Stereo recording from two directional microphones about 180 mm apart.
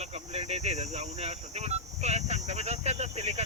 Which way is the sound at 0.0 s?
35° right (ahead or behind).